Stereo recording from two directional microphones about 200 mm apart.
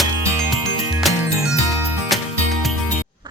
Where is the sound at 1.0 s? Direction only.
Centre (ahead or behind).